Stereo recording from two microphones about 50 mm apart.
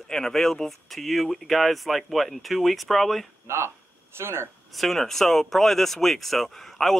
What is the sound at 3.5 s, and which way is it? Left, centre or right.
Speech, right.